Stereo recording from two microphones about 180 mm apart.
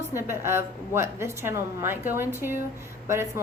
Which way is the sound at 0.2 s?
15° right (ahead or behind).